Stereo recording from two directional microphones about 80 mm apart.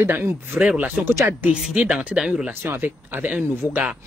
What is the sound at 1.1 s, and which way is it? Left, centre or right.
Speech, right.